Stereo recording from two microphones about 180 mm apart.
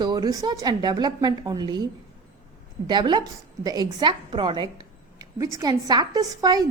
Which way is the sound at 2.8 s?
25° right (ahead or behind).